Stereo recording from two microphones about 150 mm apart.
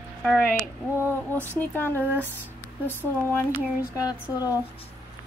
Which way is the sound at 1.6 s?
15° left (ahead or behind).